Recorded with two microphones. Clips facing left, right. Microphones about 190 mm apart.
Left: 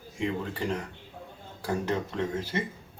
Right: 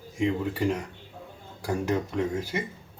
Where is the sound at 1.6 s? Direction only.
10° right (ahead or behind).